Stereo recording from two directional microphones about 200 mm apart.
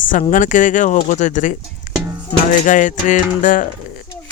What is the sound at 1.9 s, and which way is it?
Music, 40° left (ahead or behind).